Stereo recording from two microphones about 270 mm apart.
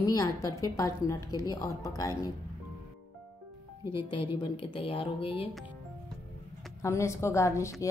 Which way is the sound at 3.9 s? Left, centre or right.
Centre.